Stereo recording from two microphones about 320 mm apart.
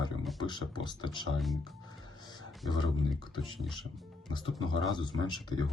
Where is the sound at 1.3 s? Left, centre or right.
Centre.